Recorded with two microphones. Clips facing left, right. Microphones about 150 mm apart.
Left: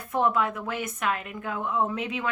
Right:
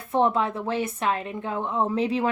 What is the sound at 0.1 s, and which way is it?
Speech, 30° right (ahead or behind).